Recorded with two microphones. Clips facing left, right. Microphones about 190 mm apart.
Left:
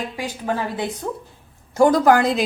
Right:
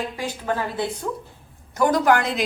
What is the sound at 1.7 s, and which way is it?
Speech, 30° left (ahead or behind).